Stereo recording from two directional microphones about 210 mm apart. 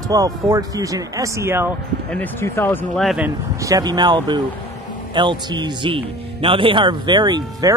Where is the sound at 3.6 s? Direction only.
15° right (ahead or behind).